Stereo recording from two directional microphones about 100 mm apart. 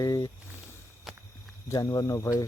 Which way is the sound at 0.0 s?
40° left (ahead or behind).